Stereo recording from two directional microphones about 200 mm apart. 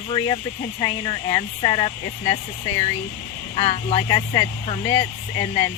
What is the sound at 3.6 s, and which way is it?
Speech, 30° left (ahead or behind).